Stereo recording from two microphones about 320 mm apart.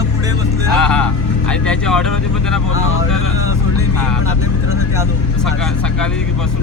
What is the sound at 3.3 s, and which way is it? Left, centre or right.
Vehicle, left.